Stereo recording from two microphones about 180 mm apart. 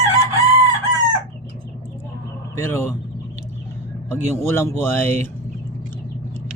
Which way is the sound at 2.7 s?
15° left (ahead or behind).